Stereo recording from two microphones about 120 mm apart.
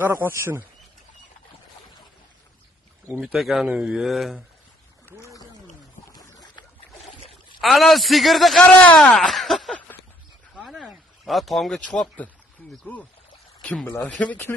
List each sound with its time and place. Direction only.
0.0 s speech: 20° right (ahead or behind)
3.2 s speech: centre (ahead or behind)
5.0 s a sound: 25° left (ahead or behind)
6.1 s boat: 30° left (ahead or behind)
7.6 s speech: centre (ahead or behind)
9.8 s a sound: 15° left (ahead or behind)
10.5 s speech: centre (ahead or behind)
13.6 s a sound: 10° left (ahead or behind)
13.8 s speech: 20° left (ahead or behind)